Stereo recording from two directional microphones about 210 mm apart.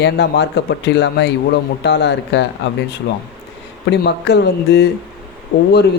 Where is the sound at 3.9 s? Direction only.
55° left (ahead or behind).